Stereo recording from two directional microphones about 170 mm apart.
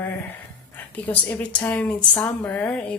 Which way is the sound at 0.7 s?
10° left (ahead or behind).